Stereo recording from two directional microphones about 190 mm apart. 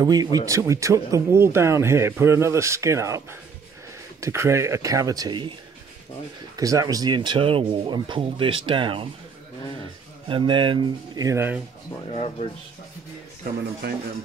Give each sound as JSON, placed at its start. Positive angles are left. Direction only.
{"t": 0.0, "sound": "speech", "side_deg": -20}
{"t": 6.5, "sound": "speech", "side_deg": -20}
{"t": 10.2, "sound": "speech", "side_deg": -25}
{"t": 12.1, "sound": "speech", "side_deg": 30}
{"t": 13.8, "sound": "speech", "side_deg": -60}